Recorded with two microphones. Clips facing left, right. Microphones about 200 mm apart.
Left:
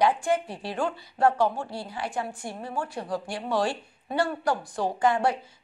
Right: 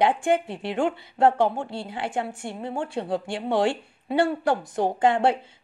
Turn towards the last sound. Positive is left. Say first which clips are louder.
# right 3 dB
turn(degrees=-25)  # may be behind; listen again after turning